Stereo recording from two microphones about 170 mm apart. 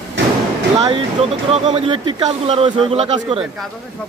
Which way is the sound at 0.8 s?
35° right (ahead or behind).